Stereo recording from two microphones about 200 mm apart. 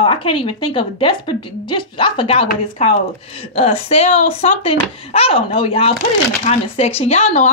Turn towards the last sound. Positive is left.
turn(degrees=35)  # may be behind; listen again after turning